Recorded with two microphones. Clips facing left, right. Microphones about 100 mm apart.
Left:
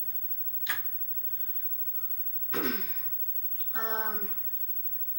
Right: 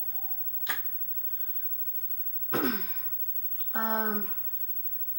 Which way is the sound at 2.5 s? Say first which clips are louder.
Right 4 dB; 40° right (ahead or behind).